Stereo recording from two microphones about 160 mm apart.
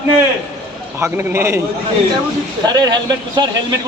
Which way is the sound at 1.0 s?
15° right (ahead or behind).